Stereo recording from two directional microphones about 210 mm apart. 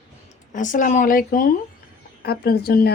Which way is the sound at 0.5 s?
40° left (ahead or behind).